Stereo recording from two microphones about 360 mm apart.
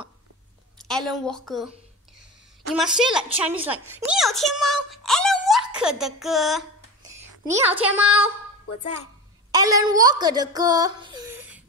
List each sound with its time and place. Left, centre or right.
0.8 s a woman's voice: centre
2.7 s a woman's voice: centre
7.0 s a sound: centre
8.6 s a woman's voice: left
9.5 s speech: centre